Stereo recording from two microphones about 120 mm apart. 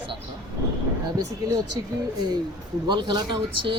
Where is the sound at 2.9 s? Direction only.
40° right (ahead or behind).